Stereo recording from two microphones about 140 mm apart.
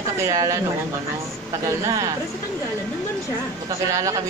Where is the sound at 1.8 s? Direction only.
20° right (ahead or behind).